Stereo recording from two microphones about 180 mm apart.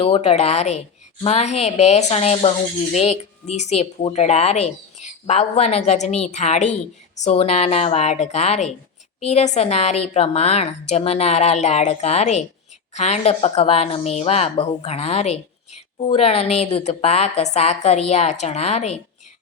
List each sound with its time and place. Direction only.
0.0 s speech: 35° left (ahead or behind)